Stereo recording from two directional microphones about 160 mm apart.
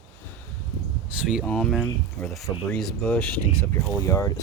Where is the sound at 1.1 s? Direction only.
5° right (ahead or behind).